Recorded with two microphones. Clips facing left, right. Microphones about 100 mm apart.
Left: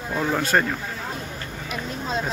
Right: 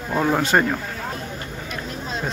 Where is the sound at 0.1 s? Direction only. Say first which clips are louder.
Right 4 dB; 20° right (ahead or behind).